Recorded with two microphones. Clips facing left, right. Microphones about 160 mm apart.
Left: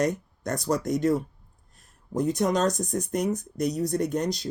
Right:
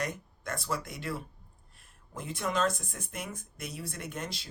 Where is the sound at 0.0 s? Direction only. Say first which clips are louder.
Left 10 dB; 45° left (ahead or behind).